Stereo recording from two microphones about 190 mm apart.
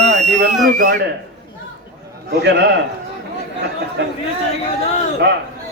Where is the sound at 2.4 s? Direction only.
60° right (ahead or behind).